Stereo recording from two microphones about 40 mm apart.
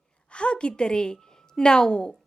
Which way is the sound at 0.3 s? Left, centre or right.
Left.